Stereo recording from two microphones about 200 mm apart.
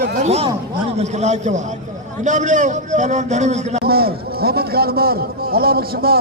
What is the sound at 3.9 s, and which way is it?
A man's voice, 50° right (ahead or behind).